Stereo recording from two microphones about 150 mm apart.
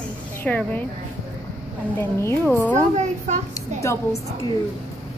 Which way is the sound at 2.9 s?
50° right (ahead or behind).